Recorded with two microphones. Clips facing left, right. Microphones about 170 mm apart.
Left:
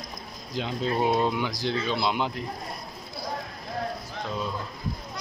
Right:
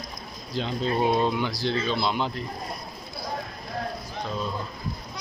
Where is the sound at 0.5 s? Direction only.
15° left (ahead or behind).